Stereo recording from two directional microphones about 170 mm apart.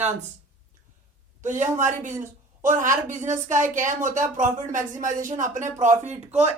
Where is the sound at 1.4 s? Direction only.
45° right (ahead or behind).